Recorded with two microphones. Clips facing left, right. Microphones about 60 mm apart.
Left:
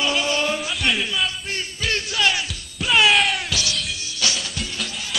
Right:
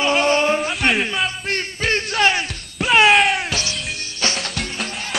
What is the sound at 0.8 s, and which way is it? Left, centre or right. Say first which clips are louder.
Music: right 2 dB; right.